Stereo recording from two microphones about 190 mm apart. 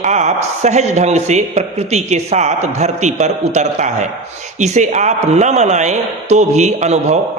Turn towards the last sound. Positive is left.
turn(degrees=-35)  # may be behind; listen again after turning